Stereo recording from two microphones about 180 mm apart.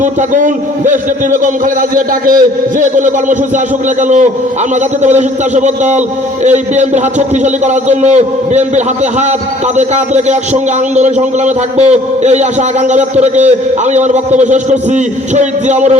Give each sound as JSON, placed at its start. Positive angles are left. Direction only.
{"t": 0.0, "sound": "a man's voice", "side_deg": -45}